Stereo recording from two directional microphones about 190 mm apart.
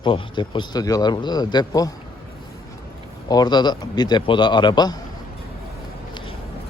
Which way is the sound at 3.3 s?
20° left (ahead or behind).